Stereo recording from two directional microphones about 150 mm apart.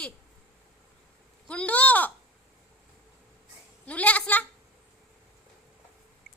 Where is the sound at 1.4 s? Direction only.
10° left (ahead or behind).